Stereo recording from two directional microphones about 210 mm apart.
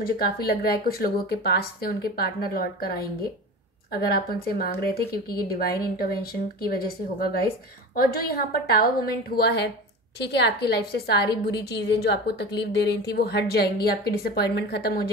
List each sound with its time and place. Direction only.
0.0 s a woman's voice: 45° left (ahead or behind)